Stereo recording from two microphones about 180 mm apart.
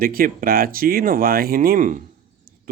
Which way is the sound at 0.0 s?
55° right (ahead or behind).